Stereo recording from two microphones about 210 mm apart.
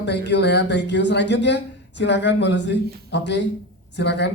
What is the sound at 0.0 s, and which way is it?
A woman's voice, 55° left (ahead or behind).